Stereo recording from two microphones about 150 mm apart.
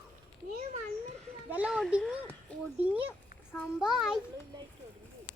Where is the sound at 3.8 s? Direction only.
5° right (ahead or behind).